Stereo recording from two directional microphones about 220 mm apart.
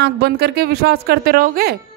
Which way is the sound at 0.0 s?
45° right (ahead or behind).